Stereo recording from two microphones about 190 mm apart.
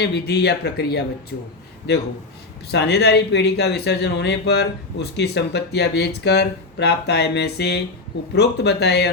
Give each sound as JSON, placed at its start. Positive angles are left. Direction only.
{"t": 0.0, "sound": "speech", "side_deg": 60}
{"t": 2.7, "sound": "speech", "side_deg": 60}